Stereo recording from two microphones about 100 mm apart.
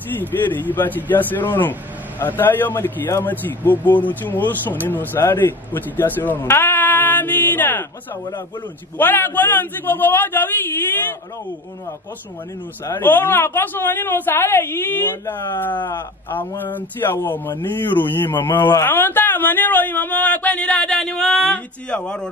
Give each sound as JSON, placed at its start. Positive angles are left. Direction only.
{"t": 0.2, "sound": "speech", "side_deg": 20}
{"t": 8.9, "sound": "speech", "side_deg": 20}
{"t": 12.9, "sound": "a woman's voice", "side_deg": 20}